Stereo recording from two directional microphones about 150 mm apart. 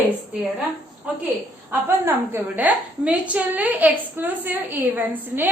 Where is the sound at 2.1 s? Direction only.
10° right (ahead or behind).